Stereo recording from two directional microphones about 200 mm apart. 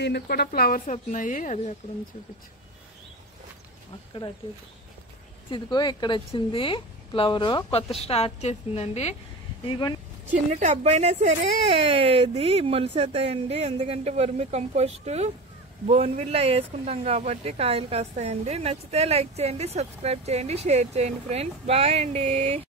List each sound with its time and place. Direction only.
0.0 s speech: 55° left (ahead or behind); by 1.8 s 35° left (ahead or behind)
5.5 s a woman's voice: 20° left (ahead or behind)
10.3 s speech: 35° right (ahead or behind)